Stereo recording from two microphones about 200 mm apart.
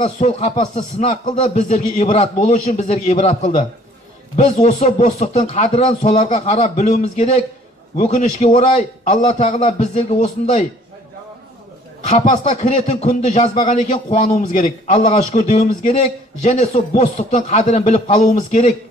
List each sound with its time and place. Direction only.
0.0 s a man's voice: 35° left (ahead or behind)
12.1 s a man's voice: 35° left (ahead or behind)